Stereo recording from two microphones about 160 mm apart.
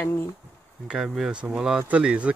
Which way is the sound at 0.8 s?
5° right (ahead or behind).